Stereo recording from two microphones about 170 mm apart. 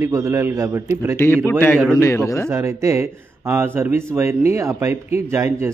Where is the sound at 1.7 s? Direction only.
Centre (ahead or behind).